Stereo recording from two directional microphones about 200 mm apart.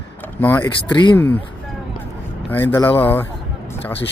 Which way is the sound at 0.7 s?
20° left (ahead or behind).